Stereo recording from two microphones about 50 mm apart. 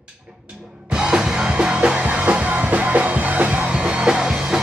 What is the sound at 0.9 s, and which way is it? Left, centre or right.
Music, centre.